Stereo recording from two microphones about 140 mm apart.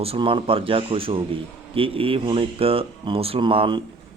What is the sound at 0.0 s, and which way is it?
A man's voice, 40° right (ahead or behind).